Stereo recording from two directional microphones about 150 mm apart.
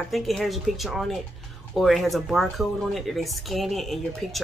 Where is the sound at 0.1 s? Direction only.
Centre (ahead or behind).